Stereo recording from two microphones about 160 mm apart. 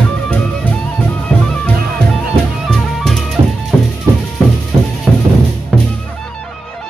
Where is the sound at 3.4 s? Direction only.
30° right (ahead or behind).